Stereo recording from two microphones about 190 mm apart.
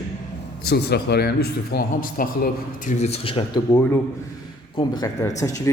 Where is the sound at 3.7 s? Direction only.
10° left (ahead or behind).